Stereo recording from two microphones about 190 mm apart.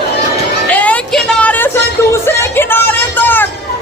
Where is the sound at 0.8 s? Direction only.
5° left (ahead or behind).